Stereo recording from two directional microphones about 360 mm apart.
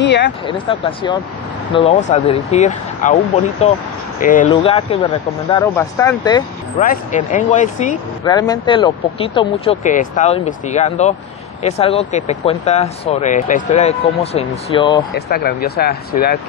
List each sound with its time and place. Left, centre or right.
0.0 s a sound: left
0.5 s speech: centre
6.8 s speech: left
15.1 s speech: left